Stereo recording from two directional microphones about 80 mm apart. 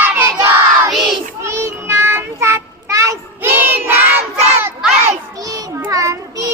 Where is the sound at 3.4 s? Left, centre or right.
Right.